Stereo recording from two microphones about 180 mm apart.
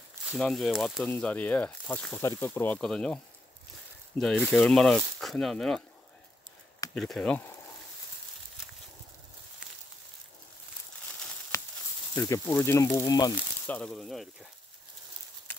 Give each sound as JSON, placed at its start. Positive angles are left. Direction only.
{"t": 0.3, "sound": "speech", "side_deg": 0}
{"t": 4.2, "sound": "speech", "side_deg": 5}
{"t": 7.0, "sound": "speech", "side_deg": 5}
{"t": 12.2, "sound": "speech", "side_deg": 15}
{"t": 13.7, "sound": "speech", "side_deg": 5}